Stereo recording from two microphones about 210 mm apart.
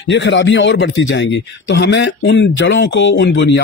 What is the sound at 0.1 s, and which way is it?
A man's voice, 60° left (ahead or behind).